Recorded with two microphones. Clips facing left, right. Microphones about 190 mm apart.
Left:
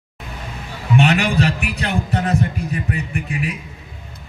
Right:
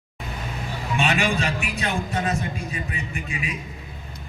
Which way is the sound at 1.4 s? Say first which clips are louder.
Left 6 dB; 65° left (ahead or behind).